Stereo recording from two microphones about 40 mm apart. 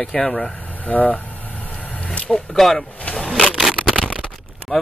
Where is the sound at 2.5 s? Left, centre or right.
Centre.